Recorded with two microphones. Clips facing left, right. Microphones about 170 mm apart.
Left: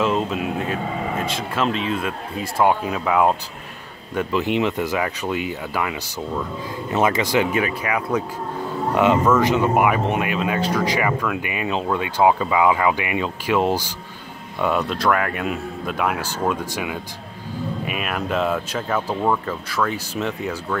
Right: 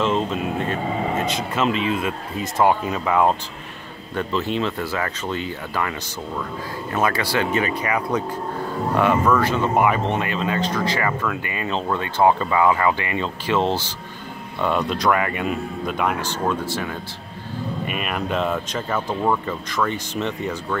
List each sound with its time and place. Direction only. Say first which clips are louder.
0.0 s speech: even; 5° left (ahead or behind)
7.6 s speech: even; 5° left (ahead or behind)
8.9 s speech: left 2 dB; 15° left (ahead or behind)
17.8 s speech: right 1 dB; centre (ahead or behind)